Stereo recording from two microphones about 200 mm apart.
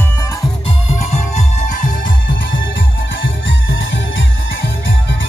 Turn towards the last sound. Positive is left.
turn(degrees=70)  # may be behind; listen again after turning